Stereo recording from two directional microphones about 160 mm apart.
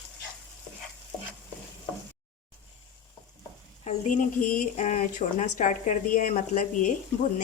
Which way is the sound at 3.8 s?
50° left (ahead or behind).